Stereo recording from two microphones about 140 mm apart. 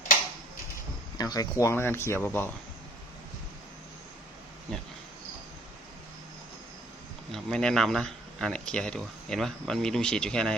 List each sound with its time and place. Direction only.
1.2 s speech: 25° left (ahead or behind)
7.3 s speech: 5° left (ahead or behind)